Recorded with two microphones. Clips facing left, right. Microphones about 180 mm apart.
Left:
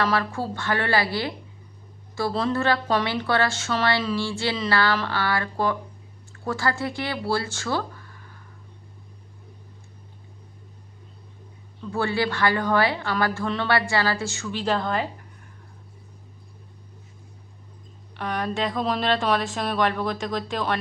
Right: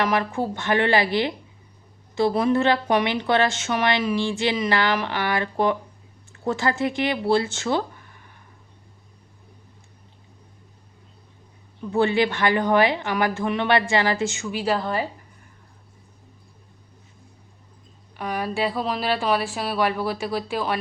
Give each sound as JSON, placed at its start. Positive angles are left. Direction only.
{"t": 0.0, "sound": "a woman's voice", "side_deg": -15}
{"t": 11.8, "sound": "speech", "side_deg": -20}
{"t": 18.2, "sound": "a woman's voice", "side_deg": -5}